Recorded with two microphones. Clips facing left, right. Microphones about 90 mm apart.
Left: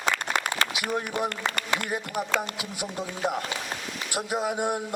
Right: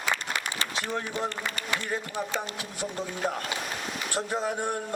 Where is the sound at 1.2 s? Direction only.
60° left (ahead or behind).